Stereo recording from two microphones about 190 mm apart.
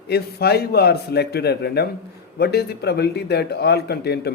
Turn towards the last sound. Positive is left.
turn(degrees=60)  # may be behind; listen again after turning